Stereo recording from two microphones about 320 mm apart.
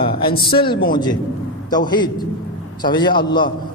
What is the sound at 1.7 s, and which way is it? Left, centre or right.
Speech, centre.